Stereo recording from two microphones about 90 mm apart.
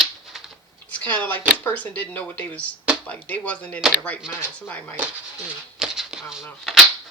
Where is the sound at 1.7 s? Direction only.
20° left (ahead or behind).